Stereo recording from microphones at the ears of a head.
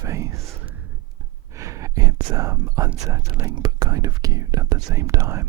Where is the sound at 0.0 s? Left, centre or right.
Right.